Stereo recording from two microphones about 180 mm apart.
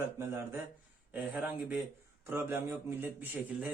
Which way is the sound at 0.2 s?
15° right (ahead or behind).